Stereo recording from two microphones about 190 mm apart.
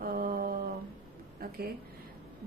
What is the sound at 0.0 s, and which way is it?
Mantra, 50° right (ahead or behind).